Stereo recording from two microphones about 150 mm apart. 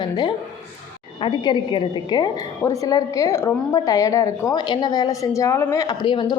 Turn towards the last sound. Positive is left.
turn(degrees=25)  # may be behind; listen again after turning